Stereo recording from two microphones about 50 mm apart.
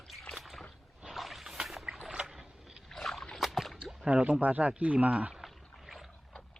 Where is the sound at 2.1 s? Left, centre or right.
Centre.